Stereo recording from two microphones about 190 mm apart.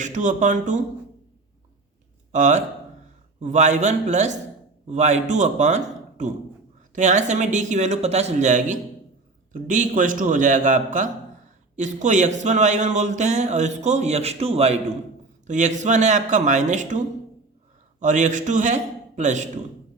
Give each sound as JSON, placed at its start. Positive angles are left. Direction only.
{"t": 0.0, "sound": "a man's voice", "side_deg": -40}
{"t": 2.3, "sound": "a man's voice", "side_deg": -40}
{"t": 18.0, "sound": "a man's voice", "side_deg": -40}